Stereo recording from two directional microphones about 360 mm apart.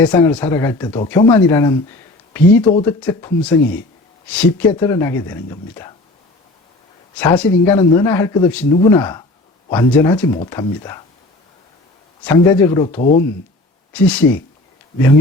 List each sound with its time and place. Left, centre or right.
0.0 s speech: centre
7.2 s speech: centre
12.2 s speech: centre
13.0 s speech: left
13.9 s speech: centre